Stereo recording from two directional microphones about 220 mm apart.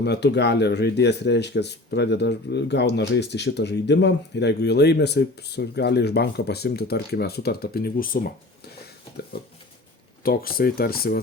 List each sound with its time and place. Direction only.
0.0 s speech: 50° left (ahead or behind)
10.2 s speech: 40° left (ahead or behind)